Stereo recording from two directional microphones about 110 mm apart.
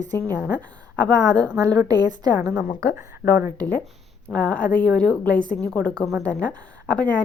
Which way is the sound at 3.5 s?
15° left (ahead or behind).